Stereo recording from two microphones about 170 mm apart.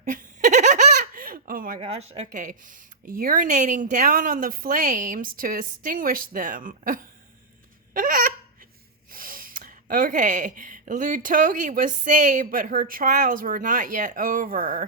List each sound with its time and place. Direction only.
0.0 s baby laughter: 50° right (ahead or behind)
1.8 s a woman's voice: 40° right (ahead or behind)
7.9 s honk: 50° right (ahead or behind)
9.1 s a woman's voice: 55° right (ahead or behind)